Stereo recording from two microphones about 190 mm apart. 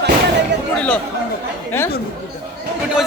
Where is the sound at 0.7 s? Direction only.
5° left (ahead or behind).